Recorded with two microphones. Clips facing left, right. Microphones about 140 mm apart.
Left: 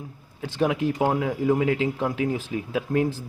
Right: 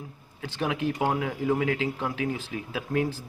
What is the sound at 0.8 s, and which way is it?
Speech, 15° left (ahead or behind).